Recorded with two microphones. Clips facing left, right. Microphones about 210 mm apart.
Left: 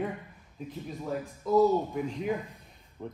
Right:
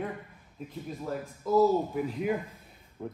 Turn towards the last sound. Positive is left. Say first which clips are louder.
# right 2 dB
turn(degrees=-5)  # may be behind; listen again after turning